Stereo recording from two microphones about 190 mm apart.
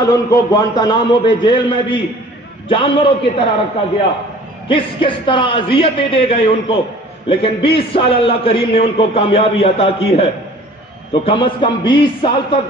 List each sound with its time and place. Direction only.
0.0 s a man's voice: 20° left (ahead or behind)
4.6 s a man's voice: 25° left (ahead or behind)